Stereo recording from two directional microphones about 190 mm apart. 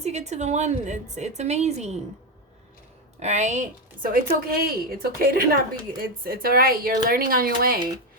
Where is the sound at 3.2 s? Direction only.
35° right (ahead or behind).